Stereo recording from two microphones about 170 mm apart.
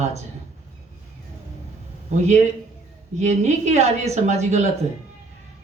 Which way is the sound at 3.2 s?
40° right (ahead or behind).